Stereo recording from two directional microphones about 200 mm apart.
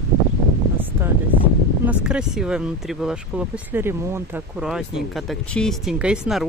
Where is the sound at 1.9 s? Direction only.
5° right (ahead or behind).